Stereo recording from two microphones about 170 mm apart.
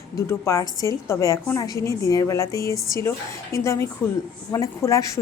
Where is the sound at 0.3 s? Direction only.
20° left (ahead or behind).